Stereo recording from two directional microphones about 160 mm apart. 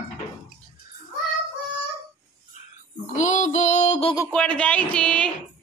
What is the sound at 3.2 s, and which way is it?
Music, 50° left (ahead or behind).